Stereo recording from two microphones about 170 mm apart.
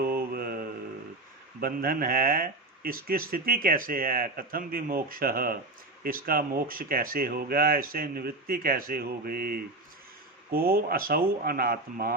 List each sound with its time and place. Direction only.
0.0 s mantra: 60° right (ahead or behind)
1.6 s speech: 60° right (ahead or behind)